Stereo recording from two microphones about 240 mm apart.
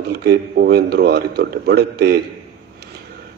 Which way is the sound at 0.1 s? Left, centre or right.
Right.